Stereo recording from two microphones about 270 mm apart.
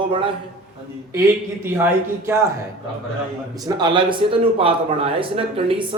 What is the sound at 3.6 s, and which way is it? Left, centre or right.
A man's voice, centre.